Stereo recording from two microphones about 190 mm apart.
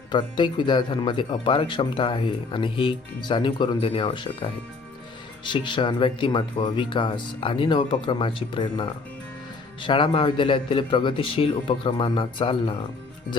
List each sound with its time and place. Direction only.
0.1 s speech: 25° left (ahead or behind)